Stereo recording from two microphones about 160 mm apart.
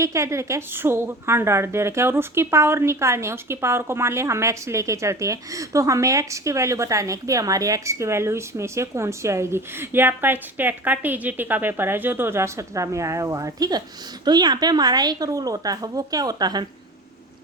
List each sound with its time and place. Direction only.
0.0 s a woman's voice: 20° right (ahead or behind)